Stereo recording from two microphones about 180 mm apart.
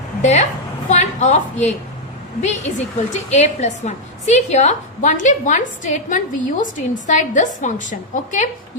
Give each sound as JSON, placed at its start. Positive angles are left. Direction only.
{"t": 0.2, "sound": "a woman's voice", "side_deg": 40}
{"t": 2.4, "sound": "a woman's voice", "side_deg": 40}